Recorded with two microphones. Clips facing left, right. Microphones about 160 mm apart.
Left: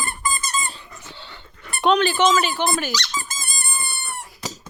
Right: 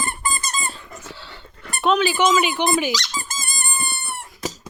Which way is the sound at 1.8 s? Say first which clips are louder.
Left 1 dB; 5° right (ahead or behind).